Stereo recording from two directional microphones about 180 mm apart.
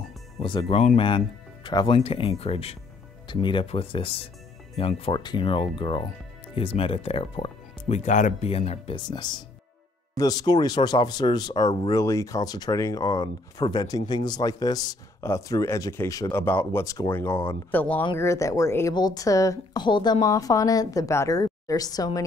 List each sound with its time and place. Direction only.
0.4 s speech: 30° left (ahead or behind)